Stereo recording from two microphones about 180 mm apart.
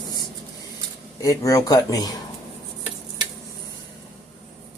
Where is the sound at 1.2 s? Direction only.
20° left (ahead or behind).